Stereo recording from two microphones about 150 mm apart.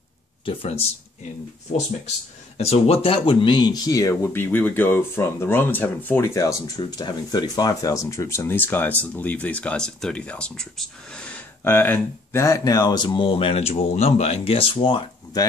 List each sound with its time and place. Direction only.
0.5 s speech: 40° left (ahead or behind)
2.5 s speech: 45° left (ahead or behind); by 6.5 s 15° left (ahead or behind)
6.8 s speech: 30° left (ahead or behind)